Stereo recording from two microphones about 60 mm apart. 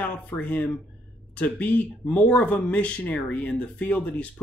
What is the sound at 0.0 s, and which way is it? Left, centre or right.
Speech, left.